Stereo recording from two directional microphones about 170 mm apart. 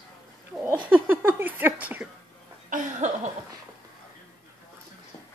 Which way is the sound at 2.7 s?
45° right (ahead or behind).